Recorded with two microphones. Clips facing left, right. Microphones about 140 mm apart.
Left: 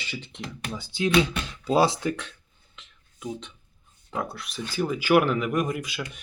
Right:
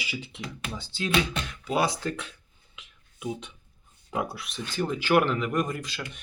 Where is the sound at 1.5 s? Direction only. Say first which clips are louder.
Left 5 dB; 30° left (ahead or behind).